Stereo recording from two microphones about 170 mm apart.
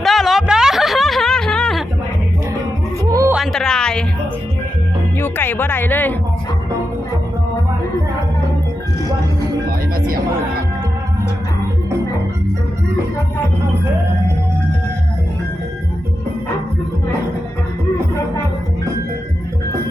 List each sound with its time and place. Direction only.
0.0 s a sound: centre (ahead or behind)
3.0 s music: 20° right (ahead or behind)
3.3 s music: centre (ahead or behind)
5.2 s music: 10° left (ahead or behind)